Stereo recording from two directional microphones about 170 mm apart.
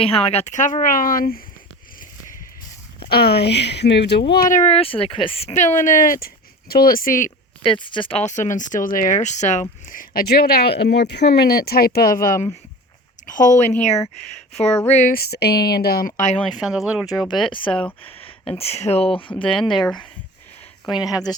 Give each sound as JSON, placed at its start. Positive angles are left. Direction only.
{"t": 0.0, "sound": "speech", "side_deg": 35}
{"t": 3.1, "sound": "speech", "side_deg": 65}
{"t": 7.6, "sound": "speech", "side_deg": 30}
{"t": 8.2, "sound": "speech", "side_deg": 45}
{"t": 14.9, "sound": "speech", "side_deg": 55}
{"t": 16.6, "sound": "speech", "side_deg": -5}
{"t": 17.1, "sound": "speech", "side_deg": 25}
{"t": 19.5, "sound": "speech", "side_deg": 5}
{"t": 19.8, "sound": "speech", "side_deg": 25}